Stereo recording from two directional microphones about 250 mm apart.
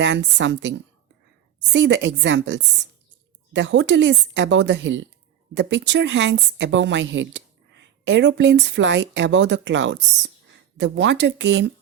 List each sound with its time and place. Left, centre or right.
0.0 s speech: right